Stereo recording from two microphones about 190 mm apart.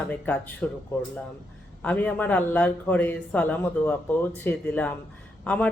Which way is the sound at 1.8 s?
5° left (ahead or behind).